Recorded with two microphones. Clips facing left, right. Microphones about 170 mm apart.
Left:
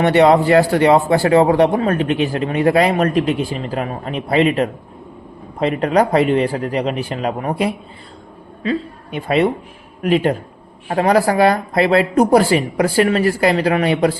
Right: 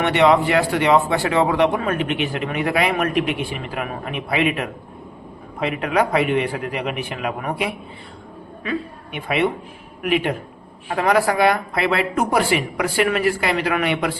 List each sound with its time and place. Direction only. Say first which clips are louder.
0.0 s speech: left 4 dB; 35° left (ahead or behind)
9.1 s speech: left 5 dB; 35° left (ahead or behind)